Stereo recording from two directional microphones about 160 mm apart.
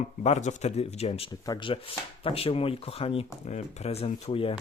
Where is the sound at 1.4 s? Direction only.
25° left (ahead or behind).